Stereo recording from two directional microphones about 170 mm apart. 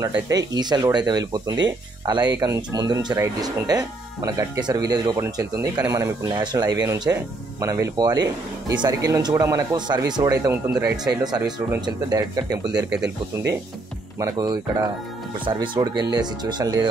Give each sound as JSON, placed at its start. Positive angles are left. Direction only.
{"t": 0.0, "sound": "speech", "side_deg": -20}
{"t": 14.2, "sound": "speech", "side_deg": -25}